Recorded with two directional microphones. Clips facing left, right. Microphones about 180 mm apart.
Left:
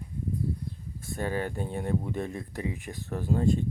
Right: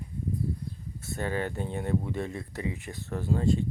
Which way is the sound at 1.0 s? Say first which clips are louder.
Even; 10° left (ahead or behind).